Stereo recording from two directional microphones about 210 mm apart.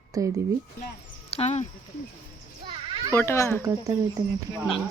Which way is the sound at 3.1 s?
10° left (ahead or behind).